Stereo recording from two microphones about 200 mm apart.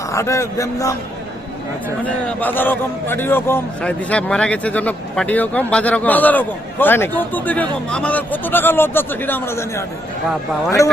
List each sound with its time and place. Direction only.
0.1 s a man's voice: 15° left (ahead or behind)
2.4 s a man's voice: 10° left (ahead or behind)